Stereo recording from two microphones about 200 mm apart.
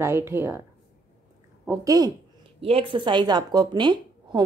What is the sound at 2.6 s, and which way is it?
A woman's voice, 30° right (ahead or behind).